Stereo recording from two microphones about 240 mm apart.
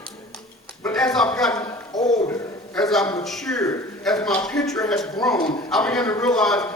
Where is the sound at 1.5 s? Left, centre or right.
Centre.